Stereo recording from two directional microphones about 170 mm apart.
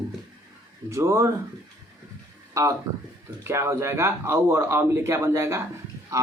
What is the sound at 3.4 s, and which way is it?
Speech, 15° right (ahead or behind).